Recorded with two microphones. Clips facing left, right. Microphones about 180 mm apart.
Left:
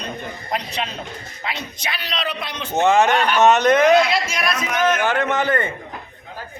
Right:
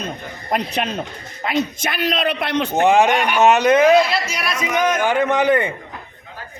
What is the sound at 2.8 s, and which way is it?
Speech, 15° right (ahead or behind).